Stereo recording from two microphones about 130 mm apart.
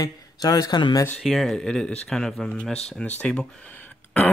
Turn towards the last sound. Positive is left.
turn(degrees=15)  # may be behind; listen again after turning